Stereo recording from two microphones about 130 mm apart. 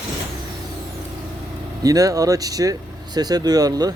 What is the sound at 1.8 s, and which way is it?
Speech, 25° right (ahead or behind).